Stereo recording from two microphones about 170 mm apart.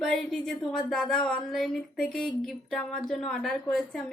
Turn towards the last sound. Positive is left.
turn(degrees=0)  # may be behind; listen again after turning